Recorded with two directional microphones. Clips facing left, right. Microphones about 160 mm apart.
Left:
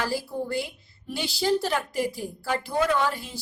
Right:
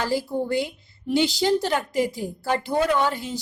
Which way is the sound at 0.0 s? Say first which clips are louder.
Right 4 dB; 20° right (ahead or behind).